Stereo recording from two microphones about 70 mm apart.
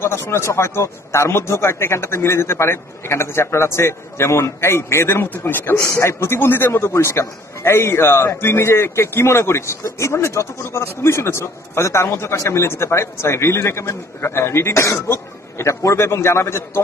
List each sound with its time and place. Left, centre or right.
0.0 s a man's voice: left